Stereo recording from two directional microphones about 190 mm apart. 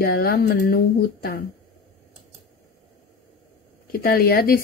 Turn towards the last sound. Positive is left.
turn(degrees=50)  # may be behind; listen again after turning